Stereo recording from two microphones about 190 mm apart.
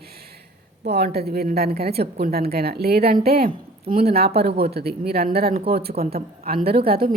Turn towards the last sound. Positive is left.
turn(degrees=-50)  # may be behind; listen again after turning